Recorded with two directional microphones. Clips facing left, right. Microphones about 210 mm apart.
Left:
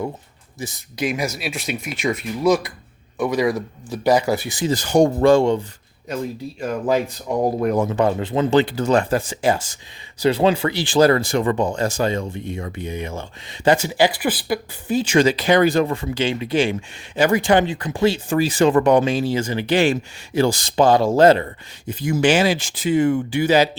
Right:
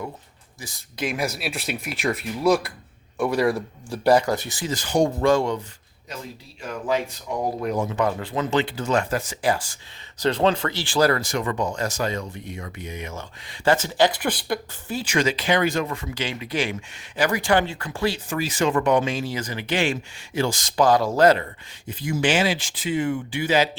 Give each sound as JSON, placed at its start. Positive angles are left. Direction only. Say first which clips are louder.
{"t": 0.6, "sound": "speech", "louder": "left 10 dB", "side_deg": 25}
{"t": 0.9, "sound": "a man's voice", "louder": "left 3 dB", "side_deg": 0}
{"t": 4.7, "sound": "speech", "louder": "left 5 dB", "side_deg": 40}
{"t": 5.2, "sound": "speech", "louder": "left 6 dB", "side_deg": 30}
{"t": 6.6, "sound": "speech", "louder": "left 5 dB", "side_deg": 45}
{"t": 7.9, "sound": "speech", "louder": "left 5 dB", "side_deg": 25}
{"t": 10.2, "sound": "speech", "louder": "left 4 dB", "side_deg": 10}
{"t": 13.7, "sound": "speech", "louder": "left 3 dB", "side_deg": 10}
{"t": 14.8, "sound": "speech", "louder": "left 7 dB", "side_deg": 25}
{"t": 21.8, "sound": "speech", "louder": "left 5 dB", "side_deg": 45}